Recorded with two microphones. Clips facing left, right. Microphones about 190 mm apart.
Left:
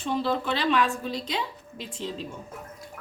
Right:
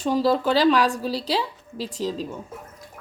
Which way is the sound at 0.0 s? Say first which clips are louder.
Right 6 dB; 40° right (ahead or behind).